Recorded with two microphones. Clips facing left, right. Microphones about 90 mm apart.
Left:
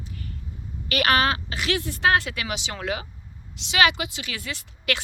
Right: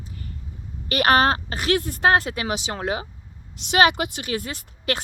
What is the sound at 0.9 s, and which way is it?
Speech, 40° right (ahead or behind).